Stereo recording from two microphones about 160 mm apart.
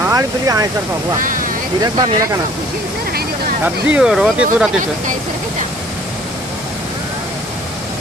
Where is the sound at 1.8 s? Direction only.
25° right (ahead or behind).